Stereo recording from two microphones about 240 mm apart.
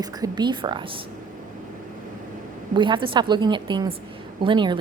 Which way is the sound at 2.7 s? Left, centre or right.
Centre.